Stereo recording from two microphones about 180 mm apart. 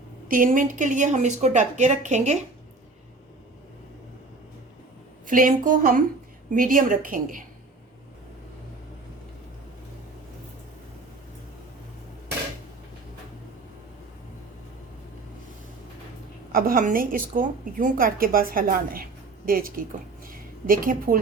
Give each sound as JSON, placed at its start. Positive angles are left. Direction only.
{"t": 0.3, "sound": "a woman's voice", "side_deg": -50}
{"t": 5.2, "sound": "a woman's voice", "side_deg": -50}
{"t": 16.5, "sound": "a woman's voice", "side_deg": -50}
{"t": 20.2, "sound": "a sound", "side_deg": -50}